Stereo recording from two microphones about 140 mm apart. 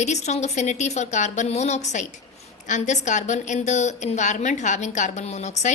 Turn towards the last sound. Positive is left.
turn(degrees=55)  # may be behind; listen again after turning